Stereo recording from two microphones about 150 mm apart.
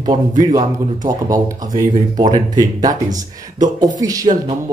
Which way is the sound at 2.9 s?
25° right (ahead or behind).